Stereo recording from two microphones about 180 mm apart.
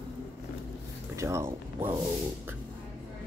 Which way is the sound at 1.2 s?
15° right (ahead or behind).